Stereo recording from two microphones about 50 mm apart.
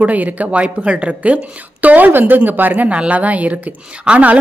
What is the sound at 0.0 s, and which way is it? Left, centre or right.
Speech, right.